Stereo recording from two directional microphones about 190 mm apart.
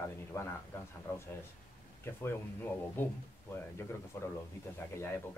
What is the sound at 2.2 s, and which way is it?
A man's voice, 10° left (ahead or behind).